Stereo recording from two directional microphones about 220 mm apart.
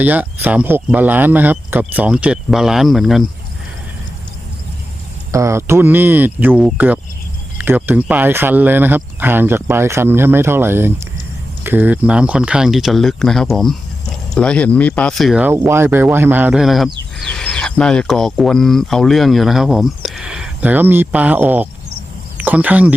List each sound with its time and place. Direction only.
0.0 s speech: 5° right (ahead or behind)
5.3 s speech: 15° right (ahead or behind)